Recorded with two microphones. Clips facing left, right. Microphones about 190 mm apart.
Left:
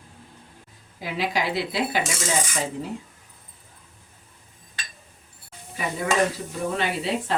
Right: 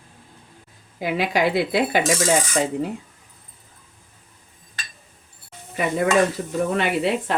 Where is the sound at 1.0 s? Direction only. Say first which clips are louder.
Right 5 dB; 55° right (ahead or behind).